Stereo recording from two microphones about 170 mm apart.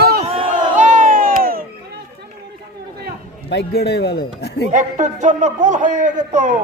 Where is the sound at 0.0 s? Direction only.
65° right (ahead or behind).